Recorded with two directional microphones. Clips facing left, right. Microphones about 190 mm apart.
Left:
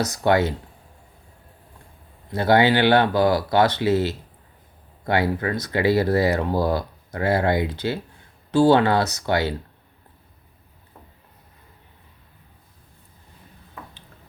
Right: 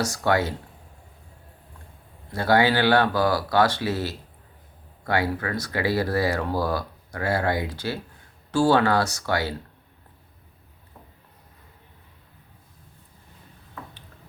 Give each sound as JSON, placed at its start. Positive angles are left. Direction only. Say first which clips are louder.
{"t": 0.0, "sound": "speech", "louder": "left 3 dB", "side_deg": 20}
{"t": 2.3, "sound": "speech", "louder": "left 3 dB", "side_deg": 20}